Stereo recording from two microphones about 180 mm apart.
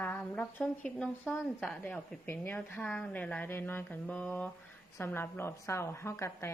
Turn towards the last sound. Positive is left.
turn(degrees=15)  # may be behind; listen again after turning